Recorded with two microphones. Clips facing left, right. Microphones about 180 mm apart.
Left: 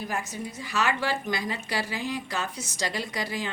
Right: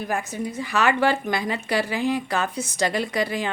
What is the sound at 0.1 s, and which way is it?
A woman's voice, 55° right (ahead or behind).